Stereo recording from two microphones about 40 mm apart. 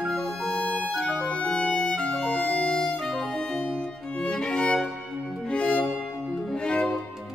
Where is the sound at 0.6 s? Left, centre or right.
Left.